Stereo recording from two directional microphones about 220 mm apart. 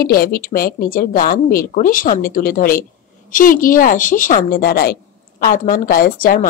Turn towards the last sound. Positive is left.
turn(degrees=40)  # may be behind; listen again after turning